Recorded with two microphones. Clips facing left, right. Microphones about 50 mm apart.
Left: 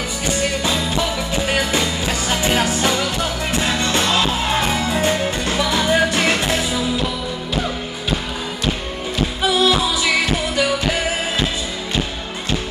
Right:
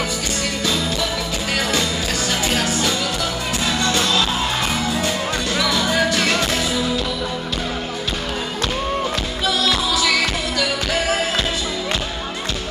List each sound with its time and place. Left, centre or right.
0.4 s music: left
9.5 s music: left